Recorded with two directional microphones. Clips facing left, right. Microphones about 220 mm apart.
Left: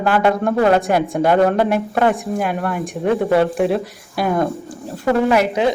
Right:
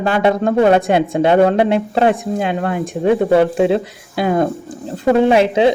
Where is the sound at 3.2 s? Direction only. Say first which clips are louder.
Right 2 dB; 25° right (ahead or behind).